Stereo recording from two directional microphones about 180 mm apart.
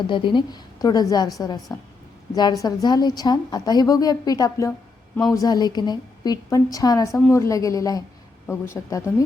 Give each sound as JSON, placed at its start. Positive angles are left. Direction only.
{"t": 0.1, "sound": "a woman's voice", "side_deg": 25}
{"t": 7.1, "sound": "speech", "side_deg": 0}
{"t": 7.3, "sound": "a woman's voice", "side_deg": 15}